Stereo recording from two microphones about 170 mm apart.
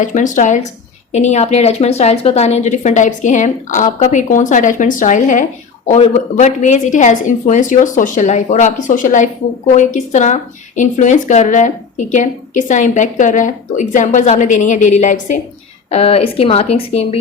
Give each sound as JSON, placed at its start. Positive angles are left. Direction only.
{"t": 0.0, "sound": "a woman's voice", "side_deg": 50}